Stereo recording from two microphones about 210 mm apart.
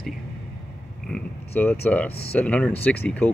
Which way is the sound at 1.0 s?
5° left (ahead or behind).